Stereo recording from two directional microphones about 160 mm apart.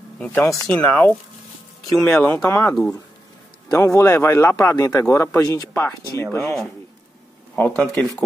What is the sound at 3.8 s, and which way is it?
Speech, 15° left (ahead or behind).